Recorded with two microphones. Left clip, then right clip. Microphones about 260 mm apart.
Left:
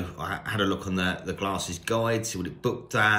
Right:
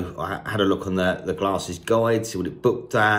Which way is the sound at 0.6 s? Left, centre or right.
Left.